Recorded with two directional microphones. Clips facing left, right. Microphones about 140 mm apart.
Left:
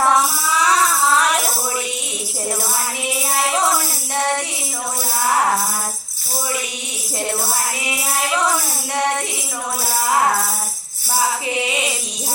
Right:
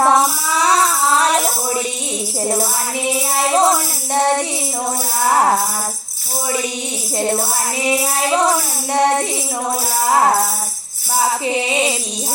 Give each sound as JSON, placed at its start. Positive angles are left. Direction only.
{"t": 0.0, "sound": "tambourine", "side_deg": -35}
{"t": 3.3, "sound": "music", "side_deg": -35}
{"t": 7.9, "sound": "music", "side_deg": -35}
{"t": 11.4, "sound": "music", "side_deg": -30}